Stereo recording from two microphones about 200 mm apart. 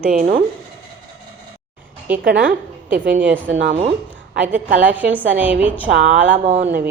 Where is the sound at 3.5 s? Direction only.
70° right (ahead or behind).